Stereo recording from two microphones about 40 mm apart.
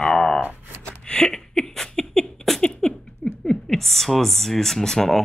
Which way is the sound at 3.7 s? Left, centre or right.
Centre.